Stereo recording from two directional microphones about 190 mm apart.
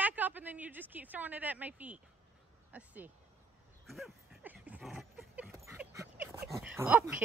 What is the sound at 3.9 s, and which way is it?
Dog, 5° right (ahead or behind).